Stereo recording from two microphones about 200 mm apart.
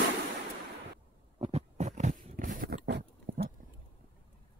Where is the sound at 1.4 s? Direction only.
30° right (ahead or behind).